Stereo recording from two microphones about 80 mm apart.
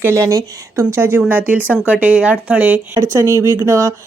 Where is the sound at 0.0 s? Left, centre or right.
Right.